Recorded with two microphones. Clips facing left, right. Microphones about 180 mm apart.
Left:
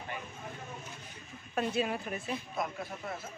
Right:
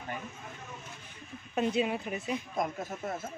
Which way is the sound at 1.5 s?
20° right (ahead or behind).